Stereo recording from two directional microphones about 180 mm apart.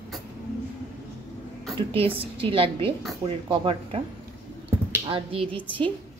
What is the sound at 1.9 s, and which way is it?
A woman's voice, 30° right (ahead or behind).